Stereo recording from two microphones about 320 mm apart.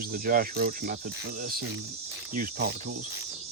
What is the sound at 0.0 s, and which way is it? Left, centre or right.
Speech, right.